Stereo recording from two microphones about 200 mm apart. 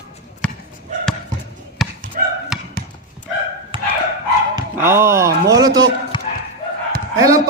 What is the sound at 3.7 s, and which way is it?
Dog, 25° right (ahead or behind).